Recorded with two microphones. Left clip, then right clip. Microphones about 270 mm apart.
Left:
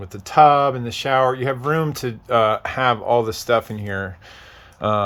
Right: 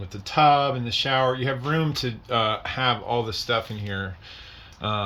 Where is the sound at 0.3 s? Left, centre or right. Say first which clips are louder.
Left 6 dB; centre.